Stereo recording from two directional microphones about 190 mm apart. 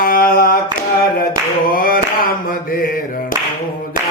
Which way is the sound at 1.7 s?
50° left (ahead or behind).